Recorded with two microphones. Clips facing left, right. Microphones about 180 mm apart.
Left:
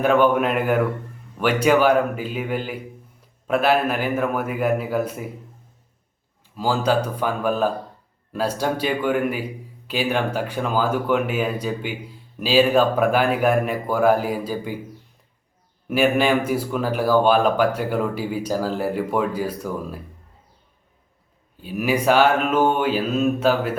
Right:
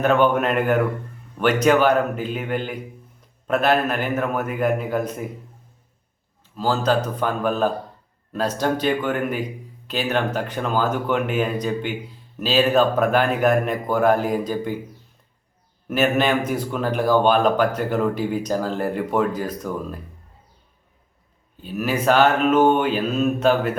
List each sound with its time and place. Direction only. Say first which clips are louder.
0.0 s speech: left 1 dB; 10° left (ahead or behind)
6.6 s speech: even; 10° left (ahead or behind)
15.9 s speech: left 1 dB; 10° left (ahead or behind)
21.6 s speech: left 1 dB; 10° left (ahead or behind)